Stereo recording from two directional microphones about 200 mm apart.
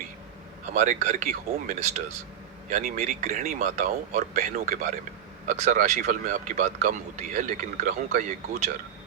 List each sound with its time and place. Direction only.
0.7 s speech: 35° right (ahead or behind)